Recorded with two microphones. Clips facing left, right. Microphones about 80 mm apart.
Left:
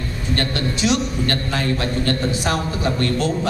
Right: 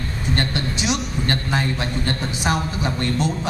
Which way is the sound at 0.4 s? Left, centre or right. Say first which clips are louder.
Left 4 dB; right.